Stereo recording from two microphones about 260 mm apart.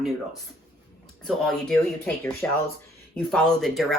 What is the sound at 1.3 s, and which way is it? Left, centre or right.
Speech, centre.